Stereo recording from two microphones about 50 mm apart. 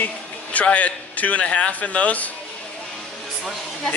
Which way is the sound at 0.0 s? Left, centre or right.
Left.